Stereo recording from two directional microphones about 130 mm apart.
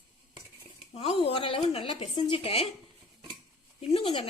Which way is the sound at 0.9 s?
45° left (ahead or behind).